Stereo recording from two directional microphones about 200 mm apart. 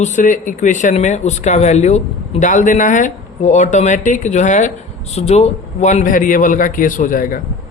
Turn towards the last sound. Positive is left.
turn(degrees=45)  # may be behind; listen again after turning